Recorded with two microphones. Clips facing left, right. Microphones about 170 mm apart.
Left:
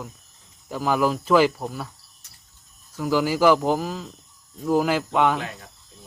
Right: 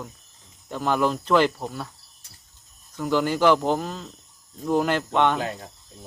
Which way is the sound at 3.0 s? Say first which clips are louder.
Left 1 dB; 5° left (ahead or behind).